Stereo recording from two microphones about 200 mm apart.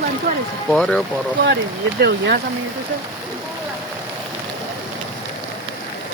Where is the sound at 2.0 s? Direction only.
55° right (ahead or behind).